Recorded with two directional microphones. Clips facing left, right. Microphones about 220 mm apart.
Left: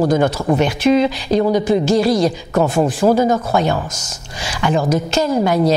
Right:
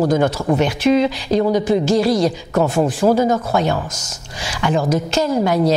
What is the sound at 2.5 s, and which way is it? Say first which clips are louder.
A man's voice: left 1 dB; 25° left (ahead or behind).